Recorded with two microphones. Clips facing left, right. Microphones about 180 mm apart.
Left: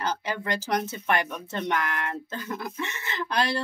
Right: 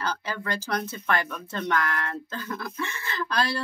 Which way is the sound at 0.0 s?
20° left (ahead or behind).